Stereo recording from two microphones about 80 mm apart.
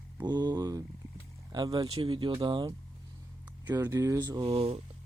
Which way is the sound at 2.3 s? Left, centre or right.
Right.